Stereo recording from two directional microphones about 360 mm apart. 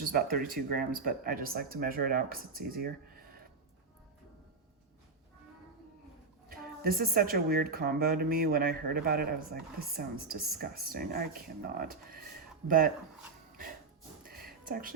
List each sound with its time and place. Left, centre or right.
0.0 s speech: right
6.5 s speech: right
13.5 s dog: right
14.3 s a sound: right